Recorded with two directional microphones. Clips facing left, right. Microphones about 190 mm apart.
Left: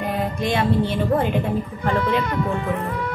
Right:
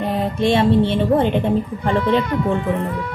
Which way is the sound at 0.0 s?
25° right (ahead or behind).